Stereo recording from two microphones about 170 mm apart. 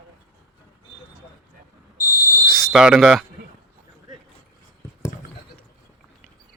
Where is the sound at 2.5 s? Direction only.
Centre (ahead or behind).